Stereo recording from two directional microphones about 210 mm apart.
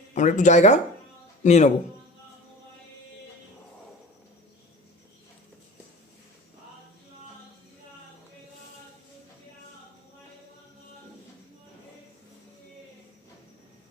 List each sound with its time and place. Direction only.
0.1 s speech: 35° left (ahead or behind)